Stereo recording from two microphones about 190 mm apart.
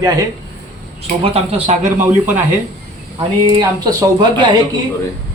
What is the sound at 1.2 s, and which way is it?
Speech, 30° right (ahead or behind).